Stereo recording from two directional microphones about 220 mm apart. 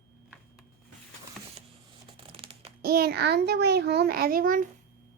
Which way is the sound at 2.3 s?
25° right (ahead or behind).